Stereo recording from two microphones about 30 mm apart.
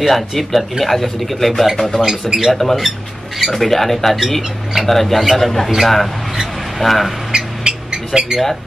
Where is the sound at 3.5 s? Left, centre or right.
Centre.